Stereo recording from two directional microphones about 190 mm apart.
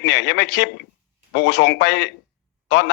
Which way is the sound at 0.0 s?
65° left (ahead or behind).